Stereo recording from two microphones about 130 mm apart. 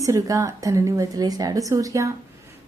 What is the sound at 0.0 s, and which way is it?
A woman's voice, 25° right (ahead or behind).